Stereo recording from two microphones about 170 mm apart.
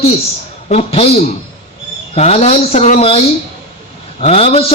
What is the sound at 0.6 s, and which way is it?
A man's voice, 35° left (ahead or behind).